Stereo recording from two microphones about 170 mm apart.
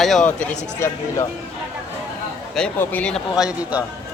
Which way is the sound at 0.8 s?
15° left (ahead or behind).